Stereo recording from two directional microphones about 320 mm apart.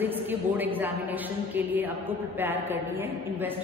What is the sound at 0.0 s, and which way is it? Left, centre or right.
A woman's voice, centre.